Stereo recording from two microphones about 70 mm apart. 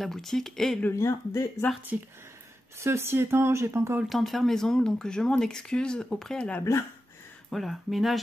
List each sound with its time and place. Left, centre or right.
0.0 s speech: centre
0.9 s speech: left
1.9 s speech: right
2.8 s speech: right
4.1 s speech: centre
7.4 s speech: centre